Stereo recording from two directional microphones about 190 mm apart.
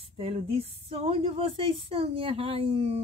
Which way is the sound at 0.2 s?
30° right (ahead or behind).